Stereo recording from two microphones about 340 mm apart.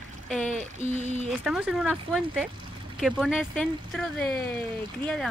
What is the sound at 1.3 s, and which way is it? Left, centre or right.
Speech, centre.